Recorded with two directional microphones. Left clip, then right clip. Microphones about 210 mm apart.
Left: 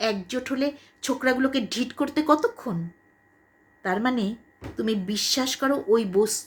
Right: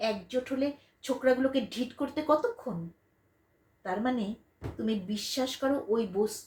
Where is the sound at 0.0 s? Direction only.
55° left (ahead or behind).